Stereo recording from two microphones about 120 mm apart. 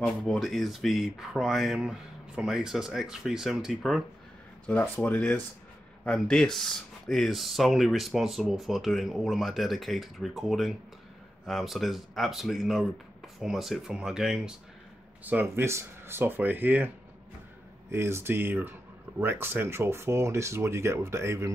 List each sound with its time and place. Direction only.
0.0 s speech: 5° left (ahead or behind)
4.6 s speech: 15° left (ahead or behind); by 14.5 s 5° right (ahead or behind)
15.5 s speech: 20° right (ahead or behind)